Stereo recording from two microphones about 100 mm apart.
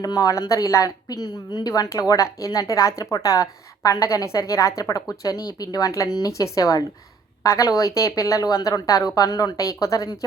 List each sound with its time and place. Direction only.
0.0 s a woman's voice: 40° left (ahead or behind)